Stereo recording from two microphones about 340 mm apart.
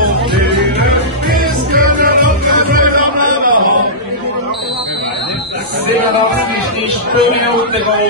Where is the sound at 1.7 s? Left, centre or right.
Right.